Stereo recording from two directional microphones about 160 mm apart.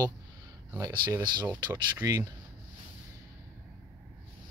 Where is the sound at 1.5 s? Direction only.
10° right (ahead or behind).